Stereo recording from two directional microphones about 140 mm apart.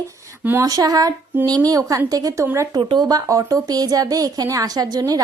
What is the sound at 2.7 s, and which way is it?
A woman's voice, 30° right (ahead or behind).